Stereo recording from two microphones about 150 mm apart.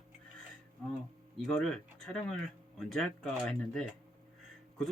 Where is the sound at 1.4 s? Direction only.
5° left (ahead or behind).